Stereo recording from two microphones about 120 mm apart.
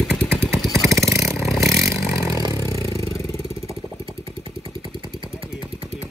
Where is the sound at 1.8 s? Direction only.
25° right (ahead or behind).